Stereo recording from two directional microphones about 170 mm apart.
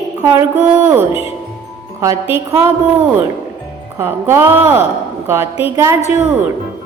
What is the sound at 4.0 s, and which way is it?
Speech, 15° right (ahead or behind).